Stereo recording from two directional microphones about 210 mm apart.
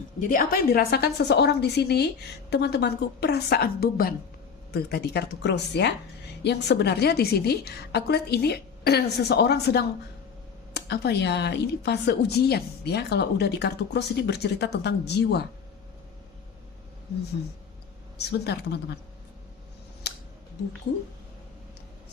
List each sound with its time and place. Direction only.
0.2 s speech: 40° left (ahead or behind)
18.2 s speech: 55° left (ahead or behind)